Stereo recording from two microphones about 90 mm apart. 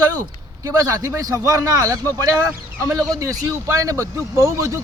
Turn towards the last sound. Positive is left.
turn(degrees=-35)  # may be behind; listen again after turning